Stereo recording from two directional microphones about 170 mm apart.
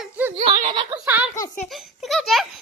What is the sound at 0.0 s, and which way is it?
Giggle, 10° right (ahead or behind).